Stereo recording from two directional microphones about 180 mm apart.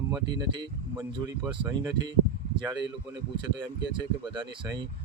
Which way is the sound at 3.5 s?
25° right (ahead or behind).